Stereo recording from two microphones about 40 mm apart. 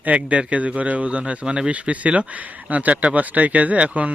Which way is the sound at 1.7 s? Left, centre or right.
Right.